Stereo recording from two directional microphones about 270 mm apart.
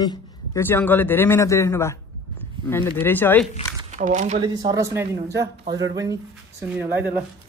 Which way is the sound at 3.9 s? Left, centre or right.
Right.